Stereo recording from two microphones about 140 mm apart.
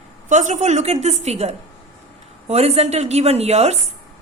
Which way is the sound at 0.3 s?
60° right (ahead or behind).